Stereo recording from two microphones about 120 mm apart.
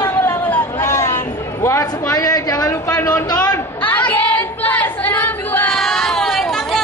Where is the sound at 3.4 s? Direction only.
15° left (ahead or behind).